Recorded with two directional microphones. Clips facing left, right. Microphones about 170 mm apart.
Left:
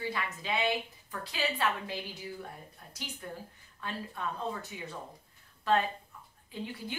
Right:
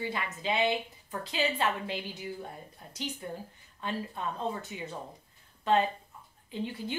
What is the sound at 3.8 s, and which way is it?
A woman's voice, 20° right (ahead or behind).